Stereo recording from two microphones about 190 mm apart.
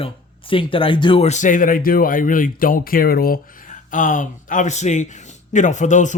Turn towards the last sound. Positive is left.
turn(degrees=40)  # may be behind; listen again after turning